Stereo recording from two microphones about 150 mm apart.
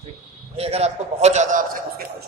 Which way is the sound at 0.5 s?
45° right (ahead or behind).